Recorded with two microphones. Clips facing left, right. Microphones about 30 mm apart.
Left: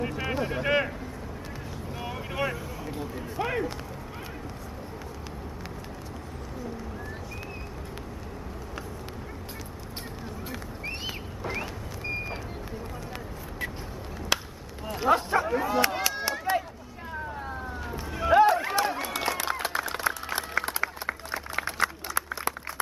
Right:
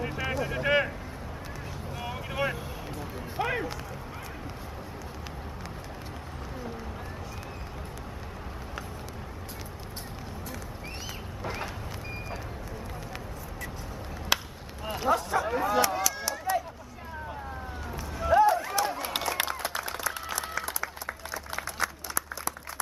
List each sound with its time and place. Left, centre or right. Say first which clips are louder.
0.3 s a sound: left 2 dB; left
0.6 s speech: right 1 dB; centre
2.0 s boat: even; centre
3.3 s speech: left 1 dB; centre
14.3 s chop: even; centre
15.0 s a sound: left 3 dB; left
15.4 s a sound: left 1 dB; centre
15.8 s run: left 1 dB; left
18.1 s run: left 2 dB; left
18.6 s run: left 2 dB; left
20.0 s applause: left 3 dB; left